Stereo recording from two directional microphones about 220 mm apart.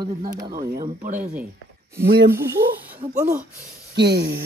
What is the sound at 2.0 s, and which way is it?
Speech, 50° right (ahead or behind).